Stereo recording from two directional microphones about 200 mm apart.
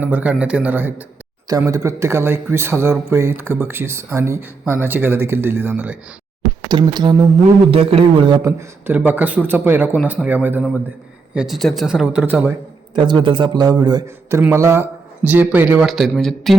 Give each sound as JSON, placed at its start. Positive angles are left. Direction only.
{"t": 0.0, "sound": "speech", "side_deg": -10}
{"t": 6.7, "sound": "a man's voice", "side_deg": -20}
{"t": 8.4, "sound": "speech", "side_deg": -10}
{"t": 12.9, "sound": "speech", "side_deg": -25}